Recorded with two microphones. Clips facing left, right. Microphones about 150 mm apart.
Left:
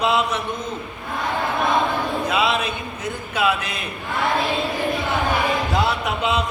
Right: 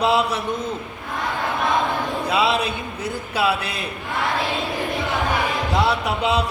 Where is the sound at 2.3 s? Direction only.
30° right (ahead or behind).